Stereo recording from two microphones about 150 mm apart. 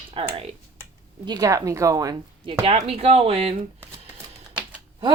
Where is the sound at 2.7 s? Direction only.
40° right (ahead or behind).